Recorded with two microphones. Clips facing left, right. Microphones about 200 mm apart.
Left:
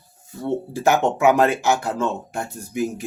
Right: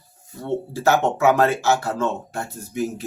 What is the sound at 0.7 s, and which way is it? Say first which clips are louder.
Speech: even; 15° left (ahead or behind).